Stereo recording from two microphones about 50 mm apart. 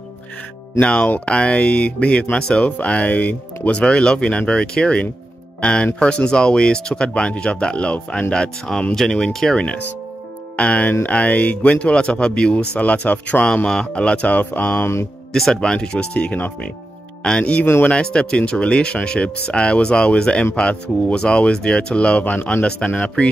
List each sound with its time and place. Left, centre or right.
0.7 s speech: left
8.9 s speech: centre
10.5 s speech: left
13.7 s speech: centre; by 14.9 s left
15.5 s speech: centre